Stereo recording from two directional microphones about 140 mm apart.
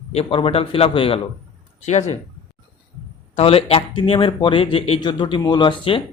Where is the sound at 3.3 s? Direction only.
45° left (ahead or behind).